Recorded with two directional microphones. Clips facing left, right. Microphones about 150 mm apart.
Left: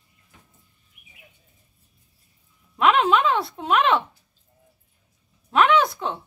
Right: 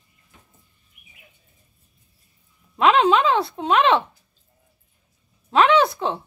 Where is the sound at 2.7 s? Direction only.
30° right (ahead or behind).